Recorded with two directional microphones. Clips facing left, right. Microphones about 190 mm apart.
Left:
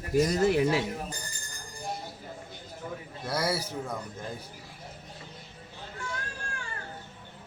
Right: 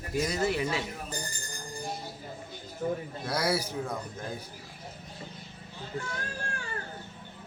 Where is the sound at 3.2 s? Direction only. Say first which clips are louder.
Even; 5° left (ahead or behind).